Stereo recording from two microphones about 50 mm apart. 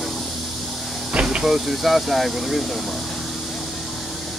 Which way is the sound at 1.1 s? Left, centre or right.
Right.